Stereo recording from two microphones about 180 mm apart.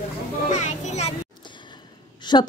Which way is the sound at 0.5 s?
40° left (ahead or behind).